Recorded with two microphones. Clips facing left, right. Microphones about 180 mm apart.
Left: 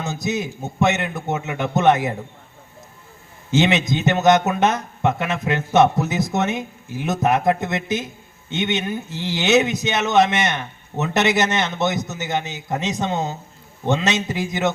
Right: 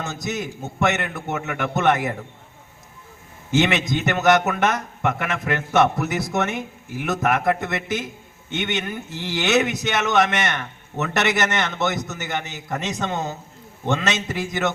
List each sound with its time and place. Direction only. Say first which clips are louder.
0.0 s a man's voice: left 3 dB; 20° left (ahead or behind)
3.5 s a man's voice: left 2 dB; 20° left (ahead or behind)